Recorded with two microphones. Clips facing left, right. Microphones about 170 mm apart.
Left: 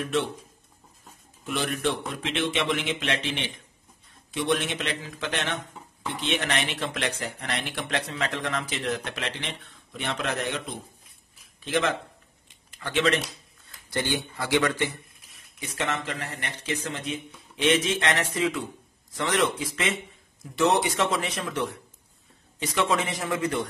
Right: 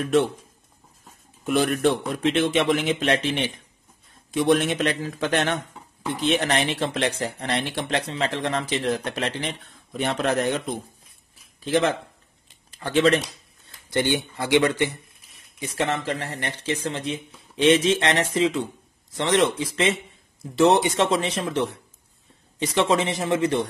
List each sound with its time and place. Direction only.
1.4 s speech: 45° right (ahead or behind)
11.6 s speech: 35° right (ahead or behind)
13.8 s speech: 20° right (ahead or behind)
15.7 s speech: 30° right (ahead or behind)
22.8 s speech: 30° right (ahead or behind)